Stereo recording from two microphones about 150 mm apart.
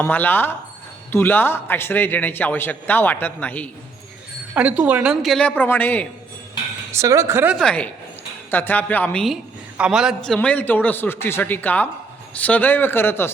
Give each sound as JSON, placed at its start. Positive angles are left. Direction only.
{"t": 0.0, "sound": "a woman's voice", "side_deg": 15}
{"t": 4.5, "sound": "speech", "side_deg": -10}
{"t": 6.9, "sound": "a woman's voice", "side_deg": -20}
{"t": 7.5, "sound": "a woman's voice", "side_deg": 5}
{"t": 9.2, "sound": "a woman's voice", "side_deg": -5}